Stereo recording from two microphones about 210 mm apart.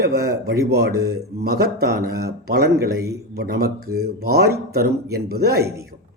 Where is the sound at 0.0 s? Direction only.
50° right (ahead or behind).